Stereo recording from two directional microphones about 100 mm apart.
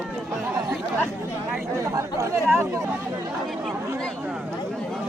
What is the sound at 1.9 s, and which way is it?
Chatter, 30° right (ahead or behind).